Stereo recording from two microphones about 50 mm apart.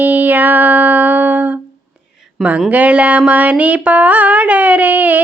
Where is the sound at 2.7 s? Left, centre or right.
Right.